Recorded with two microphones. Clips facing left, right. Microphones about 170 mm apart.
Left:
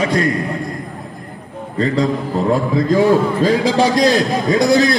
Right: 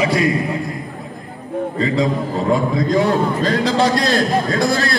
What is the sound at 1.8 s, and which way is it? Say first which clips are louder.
A man's voice: left 3 dB; centre (ahead or behind).